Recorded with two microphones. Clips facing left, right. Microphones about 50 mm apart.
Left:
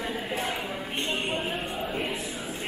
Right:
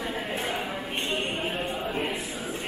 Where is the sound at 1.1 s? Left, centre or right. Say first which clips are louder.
Even; centre.